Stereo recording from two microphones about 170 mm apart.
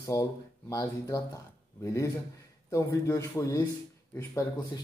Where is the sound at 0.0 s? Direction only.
20° left (ahead or behind).